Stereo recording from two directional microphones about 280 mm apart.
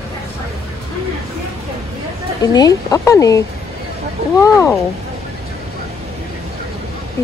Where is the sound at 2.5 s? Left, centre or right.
Centre.